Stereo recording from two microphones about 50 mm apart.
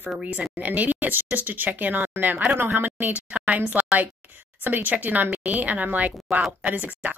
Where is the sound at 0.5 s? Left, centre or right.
Right.